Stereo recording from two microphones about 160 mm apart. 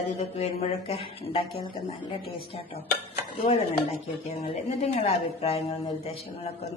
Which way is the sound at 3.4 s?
40° left (ahead or behind).